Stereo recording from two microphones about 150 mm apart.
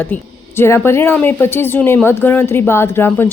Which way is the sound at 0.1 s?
15° left (ahead or behind).